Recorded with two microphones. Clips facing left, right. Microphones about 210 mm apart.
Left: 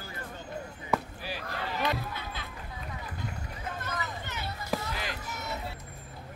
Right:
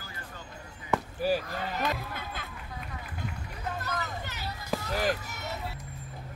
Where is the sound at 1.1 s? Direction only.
45° right (ahead or behind).